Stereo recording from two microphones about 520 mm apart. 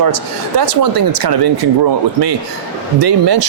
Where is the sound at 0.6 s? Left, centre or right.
Right.